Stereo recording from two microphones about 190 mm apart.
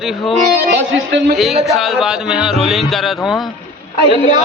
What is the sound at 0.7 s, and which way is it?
Speech, 70° right (ahead or behind).